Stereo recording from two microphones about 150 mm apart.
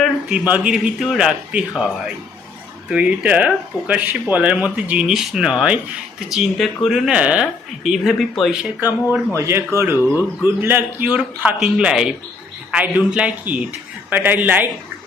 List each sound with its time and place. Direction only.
0.0 s speech: 5° right (ahead or behind)
2.9 s speech: 5° right (ahead or behind)
9.3 s speech: 20° right (ahead or behind)